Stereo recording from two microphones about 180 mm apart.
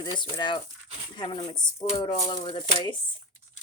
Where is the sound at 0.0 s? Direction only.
25° left (ahead or behind).